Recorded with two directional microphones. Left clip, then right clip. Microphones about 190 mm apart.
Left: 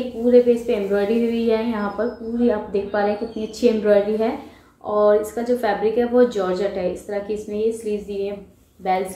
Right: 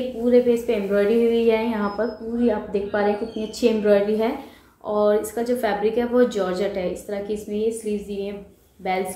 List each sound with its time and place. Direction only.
0.3 s a woman's voice: 5° right (ahead or behind)